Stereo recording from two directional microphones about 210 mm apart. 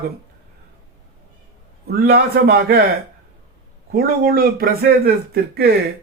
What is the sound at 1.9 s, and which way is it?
Speech, 50° right (ahead or behind).